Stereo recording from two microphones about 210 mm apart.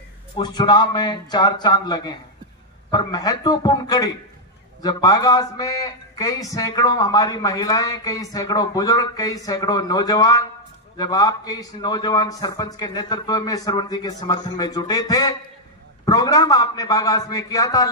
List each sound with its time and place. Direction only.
0.4 s a man's voice: 20° left (ahead or behind)